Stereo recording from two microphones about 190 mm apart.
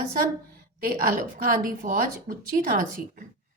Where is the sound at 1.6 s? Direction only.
50° right (ahead or behind).